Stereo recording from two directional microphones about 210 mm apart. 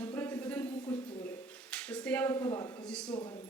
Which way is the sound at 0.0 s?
10° left (ahead or behind).